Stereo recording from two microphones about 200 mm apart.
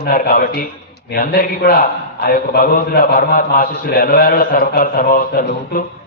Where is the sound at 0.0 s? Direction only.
45° left (ahead or behind).